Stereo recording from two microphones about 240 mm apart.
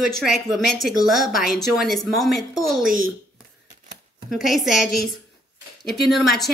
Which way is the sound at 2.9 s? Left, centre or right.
Right.